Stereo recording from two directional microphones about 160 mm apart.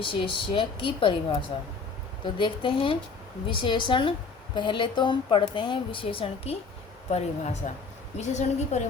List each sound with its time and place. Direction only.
0.0 s a woman's voice: 35° left (ahead or behind)